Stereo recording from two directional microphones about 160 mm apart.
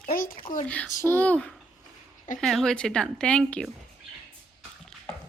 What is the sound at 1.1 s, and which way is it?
A child's voice, 10° left (ahead or behind).